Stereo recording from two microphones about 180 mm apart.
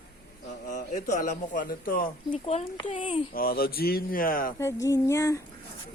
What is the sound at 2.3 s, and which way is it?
Speech, 30° left (ahead or behind).